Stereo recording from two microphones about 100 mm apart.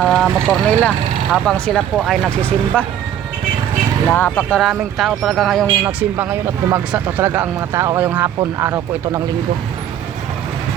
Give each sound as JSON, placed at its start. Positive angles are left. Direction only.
{"t": 0.0, "sound": "speech", "side_deg": 0}
{"t": 2.4, "sound": "speech", "side_deg": 15}
{"t": 4.1, "sound": "speech", "side_deg": 20}
{"t": 4.6, "sound": "speech", "side_deg": 0}
{"t": 5.6, "sound": "speech", "side_deg": -20}
{"t": 7.9, "sound": "speech", "side_deg": -20}
{"t": 8.5, "sound": "speech", "side_deg": -30}